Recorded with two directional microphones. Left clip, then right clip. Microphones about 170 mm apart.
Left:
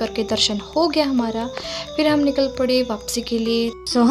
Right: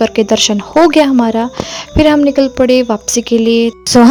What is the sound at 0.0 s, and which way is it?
A woman's voice, 55° right (ahead or behind).